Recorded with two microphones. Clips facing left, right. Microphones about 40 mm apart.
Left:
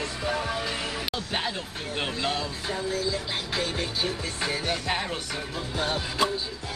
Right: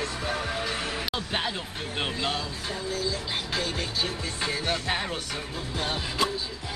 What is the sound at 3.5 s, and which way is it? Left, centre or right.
Music, centre.